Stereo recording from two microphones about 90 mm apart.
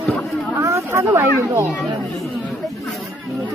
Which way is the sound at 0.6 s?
35° right (ahead or behind).